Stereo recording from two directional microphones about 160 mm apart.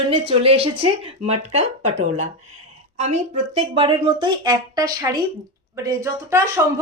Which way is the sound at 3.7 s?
30° right (ahead or behind).